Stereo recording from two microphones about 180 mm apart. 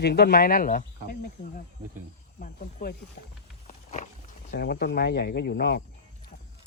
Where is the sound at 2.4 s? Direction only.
45° left (ahead or behind).